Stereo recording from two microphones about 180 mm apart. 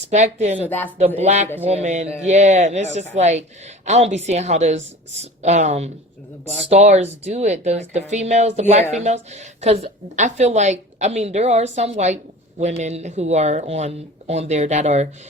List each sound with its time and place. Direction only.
0.1 s a woman's voice: 40° right (ahead or behind)